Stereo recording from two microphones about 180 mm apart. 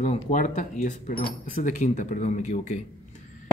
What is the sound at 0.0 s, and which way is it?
Speech, 40° left (ahead or behind).